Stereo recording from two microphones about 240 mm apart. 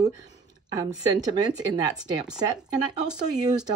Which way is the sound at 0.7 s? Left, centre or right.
Centre.